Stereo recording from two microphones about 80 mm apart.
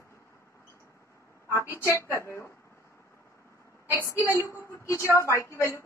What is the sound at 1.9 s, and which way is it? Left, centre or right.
Speech, left.